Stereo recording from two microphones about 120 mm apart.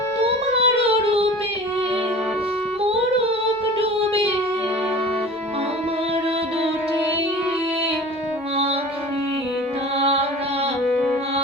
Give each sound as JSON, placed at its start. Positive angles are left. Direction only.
{"t": 0.2, "sound": "music", "side_deg": -50}
{"t": 3.8, "sound": "music", "side_deg": -55}
{"t": 10.0, "sound": "music", "side_deg": -55}
{"t": 10.8, "sound": "music", "side_deg": 0}